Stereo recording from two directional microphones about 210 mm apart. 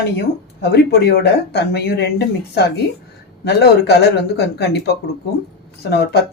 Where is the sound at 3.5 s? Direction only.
50° left (ahead or behind).